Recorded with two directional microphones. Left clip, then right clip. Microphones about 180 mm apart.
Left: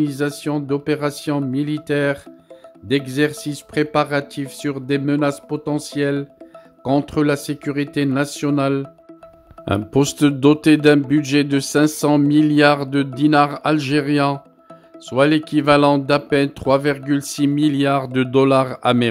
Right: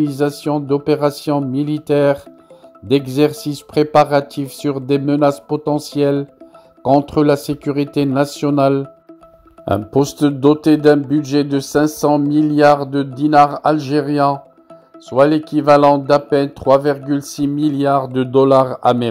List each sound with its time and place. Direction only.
0.0 s speech: 5° left (ahead or behind)
9.7 s speech: 20° left (ahead or behind)